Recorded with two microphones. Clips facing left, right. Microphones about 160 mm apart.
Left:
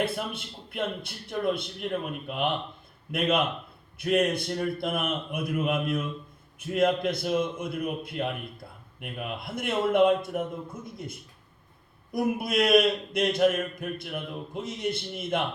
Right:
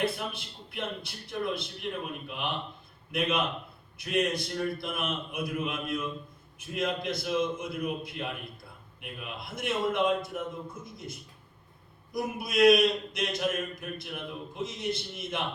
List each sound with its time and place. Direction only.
0.0 s a man's voice: 55° left (ahead or behind)